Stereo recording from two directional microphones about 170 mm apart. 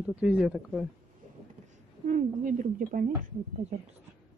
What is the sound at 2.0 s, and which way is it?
A woman's voice, 50° right (ahead or behind).